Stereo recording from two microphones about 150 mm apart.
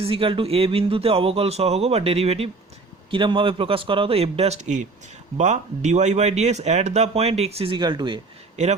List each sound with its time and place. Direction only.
0.0 s speech: 35° right (ahead or behind)
8.6 s speech: 50° right (ahead or behind)